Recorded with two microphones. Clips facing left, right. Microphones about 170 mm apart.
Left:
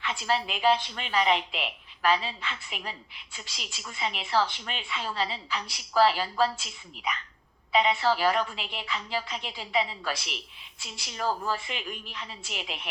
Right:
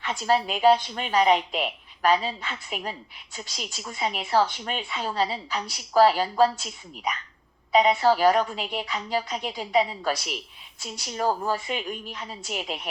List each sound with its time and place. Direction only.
0.0 s a woman's voice: 45° right (ahead or behind)